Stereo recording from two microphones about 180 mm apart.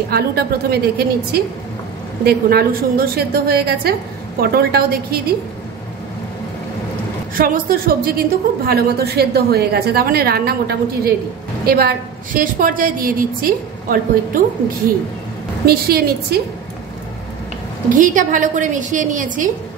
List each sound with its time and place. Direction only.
0.1 s a woman's voice: 60° right (ahead or behind)
7.3 s a woman's voice: 55° right (ahead or behind)
15.6 s a woman's voice: 60° right (ahead or behind)
17.9 s a woman's voice: 45° right (ahead or behind)